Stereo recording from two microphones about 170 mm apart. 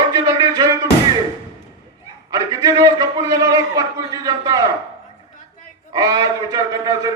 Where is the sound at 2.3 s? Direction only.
20° right (ahead or behind).